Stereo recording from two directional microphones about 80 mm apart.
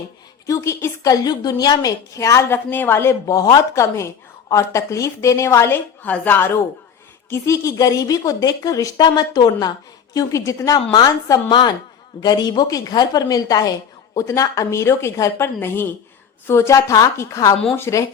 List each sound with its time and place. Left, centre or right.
0.4 s a woman's voice: left
1.0 s a woman's voice: left
6.0 s a woman's voice: left
7.3 s a woman's voice: left
9.0 s a woman's voice: left
10.2 s a woman's voice: left
10.9 s a woman's voice: left